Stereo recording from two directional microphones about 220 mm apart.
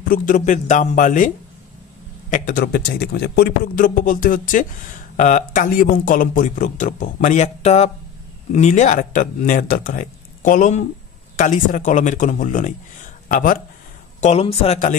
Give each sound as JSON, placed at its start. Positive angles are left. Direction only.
{"t": 0.1, "sound": "a man's voice", "side_deg": 35}
{"t": 2.3, "sound": "a man's voice", "side_deg": 40}
{"t": 14.2, "sound": "speech", "side_deg": 30}